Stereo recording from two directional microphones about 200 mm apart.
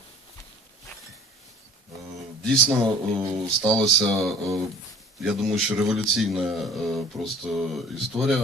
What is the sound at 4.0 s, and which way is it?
Speech, centre (ahead or behind).